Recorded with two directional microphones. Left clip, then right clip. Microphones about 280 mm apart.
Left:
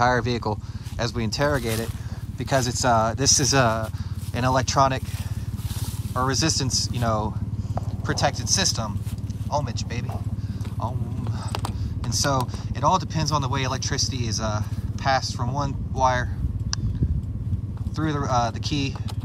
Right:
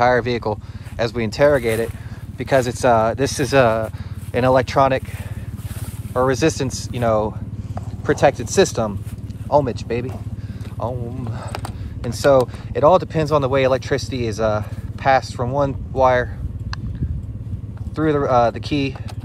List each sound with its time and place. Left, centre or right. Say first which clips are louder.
0.0 s speech: right 5 dB; centre
6.1 s speech: right 6 dB; centre
17.9 s speech: right 8 dB; centre